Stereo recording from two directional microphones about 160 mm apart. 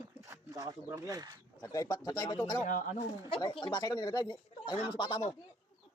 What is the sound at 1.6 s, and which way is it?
Speech, 20° left (ahead or behind).